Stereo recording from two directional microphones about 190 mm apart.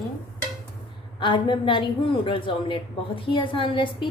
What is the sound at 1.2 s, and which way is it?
A woman's voice, 25° left (ahead or behind).